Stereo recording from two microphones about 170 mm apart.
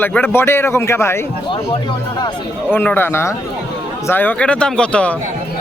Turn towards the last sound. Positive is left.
turn(degrees=5)  # may be behind; listen again after turning